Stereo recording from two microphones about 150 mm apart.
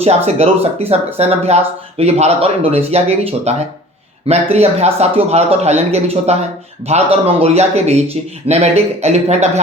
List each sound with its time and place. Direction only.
0.3 s speech: 45° right (ahead or behind)